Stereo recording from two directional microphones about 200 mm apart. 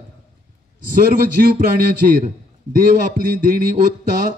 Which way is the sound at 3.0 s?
40° right (ahead or behind).